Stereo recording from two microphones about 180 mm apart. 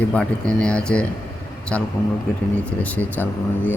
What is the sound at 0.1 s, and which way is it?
Speech, 5° left (ahead or behind).